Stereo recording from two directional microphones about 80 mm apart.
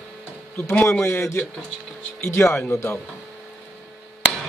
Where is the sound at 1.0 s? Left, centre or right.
Left.